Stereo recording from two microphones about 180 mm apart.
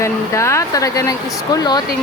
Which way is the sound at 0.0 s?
15° left (ahead or behind).